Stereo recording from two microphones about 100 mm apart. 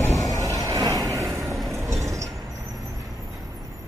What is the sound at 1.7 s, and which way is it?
Train, 30° right (ahead or behind).